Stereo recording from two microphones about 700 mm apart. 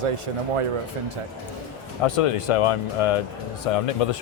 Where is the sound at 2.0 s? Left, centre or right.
Left.